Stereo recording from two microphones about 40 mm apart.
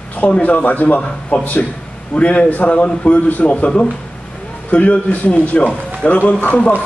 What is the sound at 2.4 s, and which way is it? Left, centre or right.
A man's voice, left.